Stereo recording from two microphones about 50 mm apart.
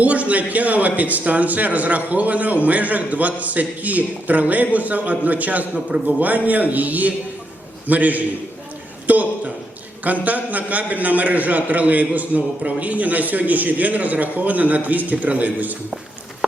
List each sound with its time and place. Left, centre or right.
0.0 s a man's voice: right